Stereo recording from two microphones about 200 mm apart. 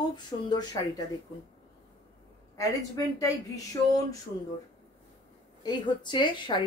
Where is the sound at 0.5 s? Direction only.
20° left (ahead or behind).